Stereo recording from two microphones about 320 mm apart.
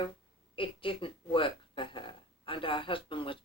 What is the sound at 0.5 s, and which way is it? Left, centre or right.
Speech, centre.